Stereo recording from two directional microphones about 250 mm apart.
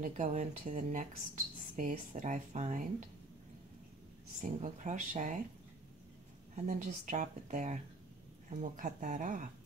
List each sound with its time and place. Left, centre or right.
0.0 s speech: right
4.4 s speech: right
6.5 s speech: right